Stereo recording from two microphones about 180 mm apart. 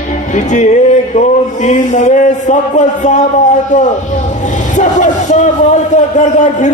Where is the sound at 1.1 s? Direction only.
40° left (ahead or behind).